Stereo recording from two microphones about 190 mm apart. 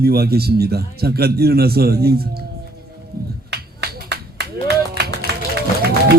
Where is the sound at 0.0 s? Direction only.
55° right (ahead or behind).